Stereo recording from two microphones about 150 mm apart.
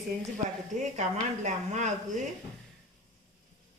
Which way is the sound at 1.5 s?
55° right (ahead or behind).